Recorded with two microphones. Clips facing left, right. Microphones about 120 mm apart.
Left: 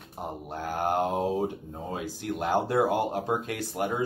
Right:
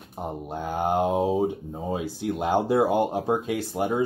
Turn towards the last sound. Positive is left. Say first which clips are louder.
# right 4 dB
turn(degrees=-15)  # may be behind; listen again after turning